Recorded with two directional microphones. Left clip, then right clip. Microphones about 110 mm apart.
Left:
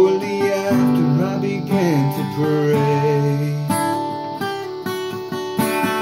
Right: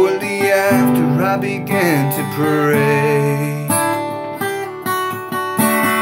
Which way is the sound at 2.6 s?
10° left (ahead or behind).